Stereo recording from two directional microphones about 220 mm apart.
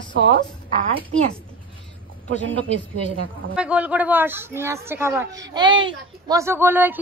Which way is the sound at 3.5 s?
5° right (ahead or behind).